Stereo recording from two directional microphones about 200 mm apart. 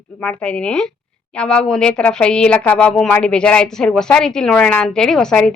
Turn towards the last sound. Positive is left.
turn(degrees=5)  # may be behind; listen again after turning